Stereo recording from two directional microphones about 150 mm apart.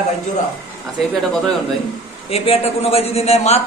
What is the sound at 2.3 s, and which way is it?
A man's voice, 40° left (ahead or behind).